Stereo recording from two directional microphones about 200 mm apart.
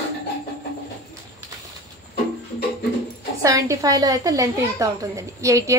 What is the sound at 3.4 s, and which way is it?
A woman's voice, 15° right (ahead or behind).